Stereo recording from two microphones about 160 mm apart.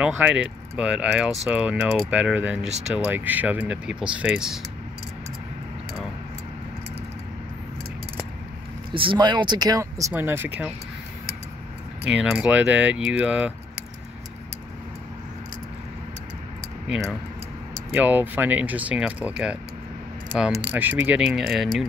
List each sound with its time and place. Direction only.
0.0 s speech: 5° right (ahead or behind)
8.9 s speech: 30° right (ahead or behind); by 10.7 s 15° right (ahead or behind)
12.1 s speech: 5° right (ahead or behind)
16.9 s speech: centre (ahead or behind)